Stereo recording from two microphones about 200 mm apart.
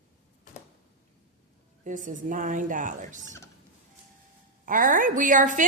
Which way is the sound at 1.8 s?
40° right (ahead or behind).